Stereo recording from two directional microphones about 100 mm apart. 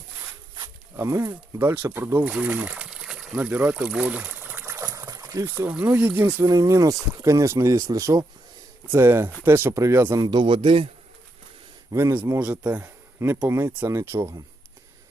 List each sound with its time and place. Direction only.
0.9 s speech: 30° right (ahead or behind)
4.9 s a sound: 35° right (ahead or behind)
5.6 s speech: 15° right (ahead or behind)
6.5 s speech: 35° right (ahead or behind)
8.9 s speech: 25° right (ahead or behind)
10.1 s a man's voice: 50° right (ahead or behind)
11.9 s speech: 35° right (ahead or behind)
12.4 s speech: 15° right (ahead or behind)
12.8 s a sound: 25° right (ahead or behind)
13.5 s speech: 30° right (ahead or behind)